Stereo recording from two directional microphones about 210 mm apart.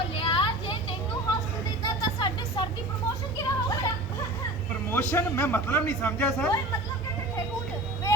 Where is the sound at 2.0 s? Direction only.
20° left (ahead or behind).